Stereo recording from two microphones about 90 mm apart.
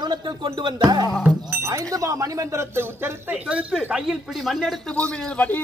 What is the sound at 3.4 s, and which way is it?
Speech, 10° right (ahead or behind).